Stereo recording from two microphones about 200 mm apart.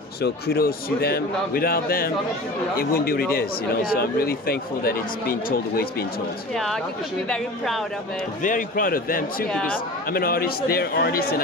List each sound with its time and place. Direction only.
0.2 s speech: 50° left (ahead or behind)
6.5 s speech: centre (ahead or behind)
8.4 s speech: 40° left (ahead or behind)